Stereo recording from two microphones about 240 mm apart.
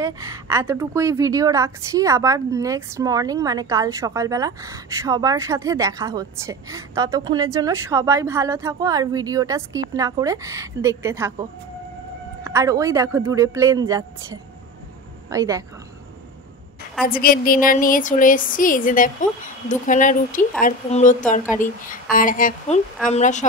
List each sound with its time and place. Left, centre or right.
0.0 s a woman's voice: centre
12.4 s a woman's voice: centre
17.0 s a woman's voice: left